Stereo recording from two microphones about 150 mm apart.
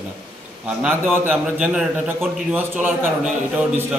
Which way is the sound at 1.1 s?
10° right (ahead or behind).